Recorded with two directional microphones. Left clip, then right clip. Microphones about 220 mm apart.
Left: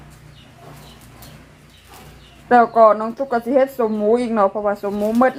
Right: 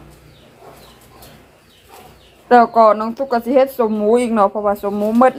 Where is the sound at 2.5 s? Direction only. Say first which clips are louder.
Right 2 dB; 20° right (ahead or behind).